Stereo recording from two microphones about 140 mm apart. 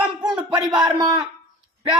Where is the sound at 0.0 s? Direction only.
10° right (ahead or behind).